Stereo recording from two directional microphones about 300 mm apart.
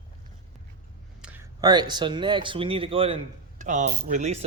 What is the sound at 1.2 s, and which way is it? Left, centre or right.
Speech, centre.